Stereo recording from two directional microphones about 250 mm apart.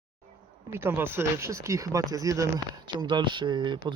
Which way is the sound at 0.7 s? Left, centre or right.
Centre.